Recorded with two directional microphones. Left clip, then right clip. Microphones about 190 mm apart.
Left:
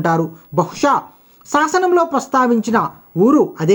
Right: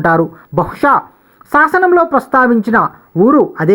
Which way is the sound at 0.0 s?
30° right (ahead or behind).